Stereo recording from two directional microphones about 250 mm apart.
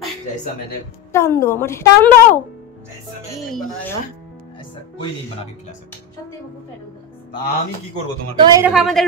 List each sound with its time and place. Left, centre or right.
1.1 s a woman's voice: centre
8.3 s a woman's voice: centre
8.6 s speech: centre